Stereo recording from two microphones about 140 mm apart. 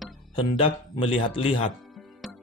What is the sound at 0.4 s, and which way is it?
Speech, 40° left (ahead or behind).